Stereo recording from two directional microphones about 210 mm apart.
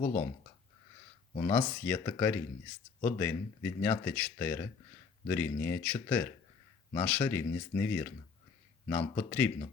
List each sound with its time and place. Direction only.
0.0 s speech: 35° left (ahead or behind)
1.5 s speech: 5° left (ahead or behind)